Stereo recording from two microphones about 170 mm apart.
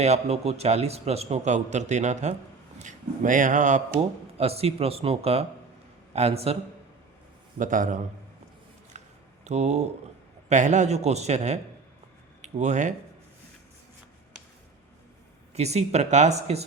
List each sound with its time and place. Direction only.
0.0 s a man's voice: 40° right (ahead or behind)
4.4 s a man's voice: 35° right (ahead or behind)
7.6 s a man's voice: 50° right (ahead or behind)
8.9 s a sound: 45° right (ahead or behind)
9.4 s a man's voice: 40° right (ahead or behind)
15.5 s a man's voice: 40° right (ahead or behind)